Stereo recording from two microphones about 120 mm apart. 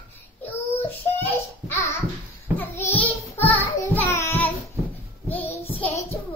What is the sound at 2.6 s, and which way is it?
Child singing, 15° left (ahead or behind).